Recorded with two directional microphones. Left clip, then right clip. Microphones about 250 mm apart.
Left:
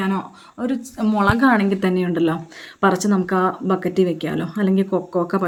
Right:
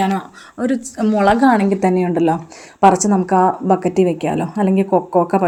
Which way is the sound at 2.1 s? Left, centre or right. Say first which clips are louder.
Right 4 dB; right.